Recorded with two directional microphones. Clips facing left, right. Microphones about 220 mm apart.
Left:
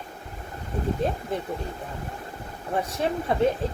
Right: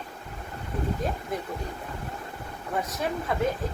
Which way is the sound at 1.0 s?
30° left (ahead or behind).